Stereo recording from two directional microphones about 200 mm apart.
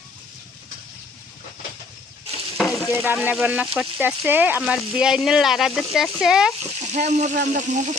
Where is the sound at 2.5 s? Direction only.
Centre (ahead or behind).